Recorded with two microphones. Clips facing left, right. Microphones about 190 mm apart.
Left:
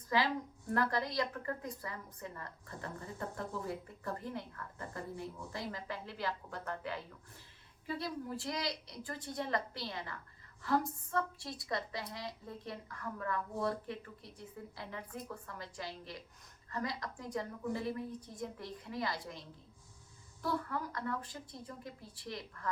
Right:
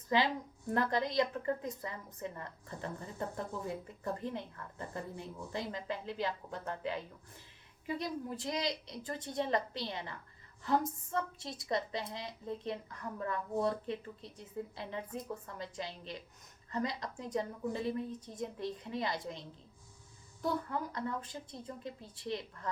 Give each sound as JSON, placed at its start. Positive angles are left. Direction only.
{"t": 0.1, "sound": "a woman's voice", "side_deg": -20}